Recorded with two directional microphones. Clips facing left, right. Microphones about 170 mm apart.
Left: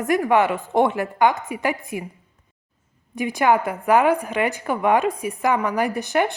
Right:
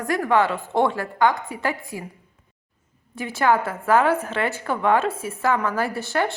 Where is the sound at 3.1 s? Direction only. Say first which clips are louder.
Left 2 dB; 15° left (ahead or behind).